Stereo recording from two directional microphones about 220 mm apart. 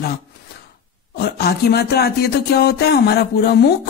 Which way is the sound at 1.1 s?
45° left (ahead or behind).